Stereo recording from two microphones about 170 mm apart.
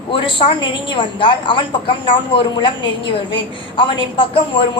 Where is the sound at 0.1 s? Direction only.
30° left (ahead or behind).